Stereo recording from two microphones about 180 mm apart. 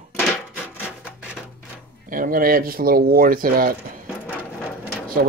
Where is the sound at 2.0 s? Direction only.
50° right (ahead or behind).